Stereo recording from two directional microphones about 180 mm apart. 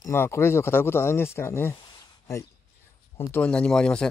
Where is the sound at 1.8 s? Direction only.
20° left (ahead or behind).